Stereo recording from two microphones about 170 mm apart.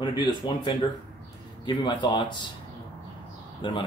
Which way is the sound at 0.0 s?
25° left (ahead or behind).